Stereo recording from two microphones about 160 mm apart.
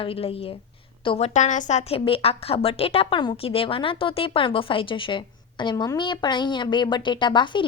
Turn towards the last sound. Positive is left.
turn(degrees=30)  # may be behind; listen again after turning